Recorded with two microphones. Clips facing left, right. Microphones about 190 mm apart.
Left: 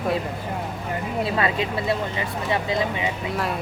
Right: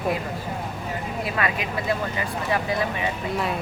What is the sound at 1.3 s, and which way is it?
Speech, 25° left (ahead or behind).